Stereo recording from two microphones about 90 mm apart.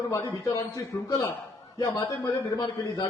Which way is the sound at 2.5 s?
45° left (ahead or behind).